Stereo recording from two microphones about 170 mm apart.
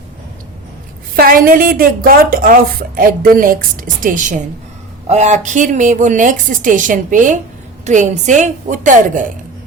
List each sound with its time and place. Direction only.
1.1 s a woman's voice: 60° right (ahead or behind)